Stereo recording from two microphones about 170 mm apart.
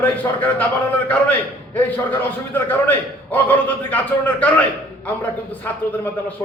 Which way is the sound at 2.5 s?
10° left (ahead or behind).